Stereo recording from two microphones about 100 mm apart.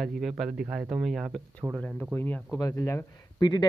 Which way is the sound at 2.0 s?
20° left (ahead or behind).